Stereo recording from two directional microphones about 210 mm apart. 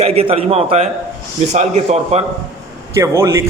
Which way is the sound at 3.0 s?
15° right (ahead or behind).